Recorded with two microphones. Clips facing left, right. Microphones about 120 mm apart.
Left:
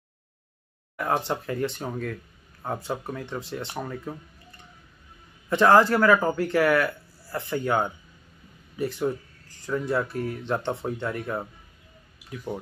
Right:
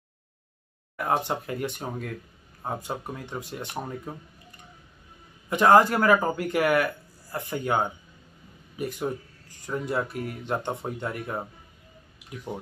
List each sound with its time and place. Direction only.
1.0 s speech: 20° right (ahead or behind)
5.5 s speech: 15° right (ahead or behind)